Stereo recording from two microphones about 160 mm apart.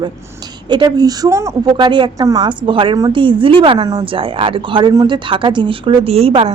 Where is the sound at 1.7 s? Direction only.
30° right (ahead or behind).